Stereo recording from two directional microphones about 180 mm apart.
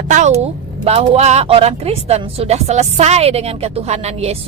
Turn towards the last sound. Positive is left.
turn(degrees=-35)  # may be behind; listen again after turning